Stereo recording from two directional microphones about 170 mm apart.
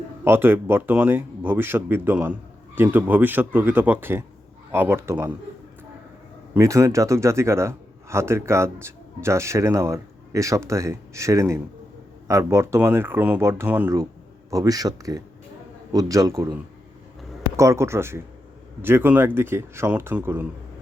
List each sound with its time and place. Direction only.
0.3 s a man's voice: 15° right (ahead or behind)
6.5 s a man's voice: 20° right (ahead or behind)
17.6 s a man's voice: 15° right (ahead or behind)